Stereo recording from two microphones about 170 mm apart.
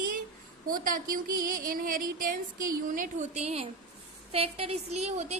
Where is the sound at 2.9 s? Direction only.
50° right (ahead or behind).